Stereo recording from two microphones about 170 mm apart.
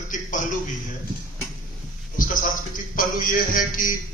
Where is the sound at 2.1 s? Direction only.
50° left (ahead or behind).